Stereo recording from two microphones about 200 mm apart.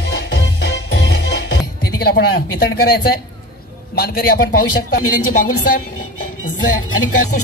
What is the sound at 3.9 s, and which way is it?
Speech, 50° left (ahead or behind).